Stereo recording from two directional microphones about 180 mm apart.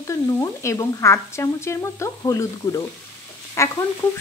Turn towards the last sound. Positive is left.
turn(degrees=15)  # may be behind; listen again after turning